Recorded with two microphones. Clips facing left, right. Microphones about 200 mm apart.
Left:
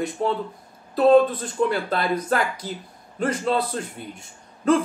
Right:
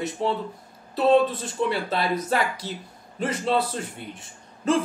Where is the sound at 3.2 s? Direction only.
5° right (ahead or behind).